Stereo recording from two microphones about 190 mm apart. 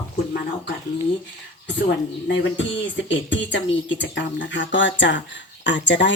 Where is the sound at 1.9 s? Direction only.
70° left (ahead or behind).